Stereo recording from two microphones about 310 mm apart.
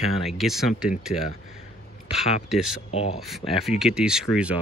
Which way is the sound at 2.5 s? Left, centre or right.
Centre.